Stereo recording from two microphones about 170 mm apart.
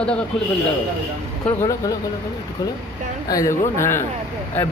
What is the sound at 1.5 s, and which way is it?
Speech, 20° left (ahead or behind).